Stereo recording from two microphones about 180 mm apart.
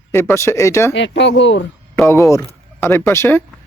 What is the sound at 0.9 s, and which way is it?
Speech, 80° left.